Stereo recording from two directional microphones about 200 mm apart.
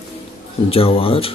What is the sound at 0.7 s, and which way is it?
Speech, 30° left (ahead or behind).